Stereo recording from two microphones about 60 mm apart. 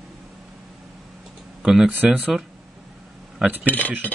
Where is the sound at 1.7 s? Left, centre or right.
Centre.